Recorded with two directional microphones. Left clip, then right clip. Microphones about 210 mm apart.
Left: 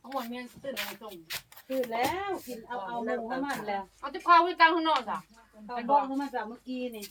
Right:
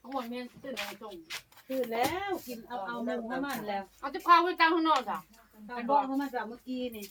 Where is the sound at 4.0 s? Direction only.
5° left (ahead or behind).